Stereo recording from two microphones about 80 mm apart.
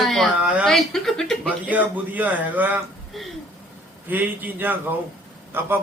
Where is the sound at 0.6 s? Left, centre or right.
Centre.